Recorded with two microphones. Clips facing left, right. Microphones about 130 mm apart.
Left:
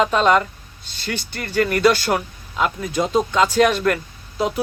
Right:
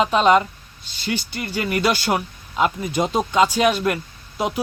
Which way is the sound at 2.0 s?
20° right (ahead or behind).